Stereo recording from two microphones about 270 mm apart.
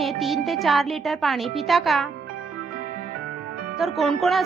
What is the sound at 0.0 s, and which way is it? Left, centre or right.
Speech, centre.